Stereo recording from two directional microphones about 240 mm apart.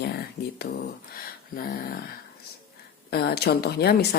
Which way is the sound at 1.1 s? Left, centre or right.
Left.